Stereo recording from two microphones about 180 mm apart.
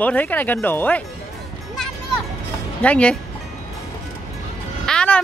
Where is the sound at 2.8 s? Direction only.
5° left (ahead or behind).